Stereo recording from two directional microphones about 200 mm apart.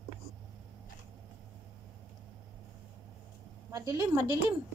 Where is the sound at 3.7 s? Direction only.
15° right (ahead or behind).